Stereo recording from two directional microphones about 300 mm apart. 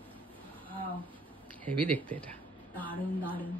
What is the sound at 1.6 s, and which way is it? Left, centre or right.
Speech, centre.